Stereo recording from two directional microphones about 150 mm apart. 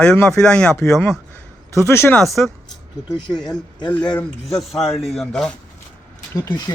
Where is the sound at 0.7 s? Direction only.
15° left (ahead or behind).